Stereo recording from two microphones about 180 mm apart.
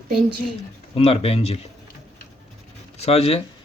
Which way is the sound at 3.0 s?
35° left (ahead or behind).